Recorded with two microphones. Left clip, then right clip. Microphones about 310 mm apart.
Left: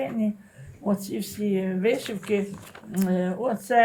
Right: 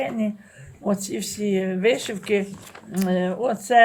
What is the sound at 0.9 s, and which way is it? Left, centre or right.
Speech, right.